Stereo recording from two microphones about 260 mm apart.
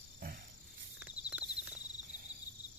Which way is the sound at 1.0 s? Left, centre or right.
Centre.